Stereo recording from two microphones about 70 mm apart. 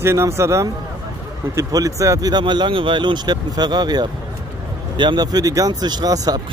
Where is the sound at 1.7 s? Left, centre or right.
Right.